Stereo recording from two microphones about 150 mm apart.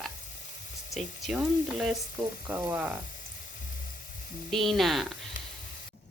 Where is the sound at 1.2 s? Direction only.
Centre (ahead or behind).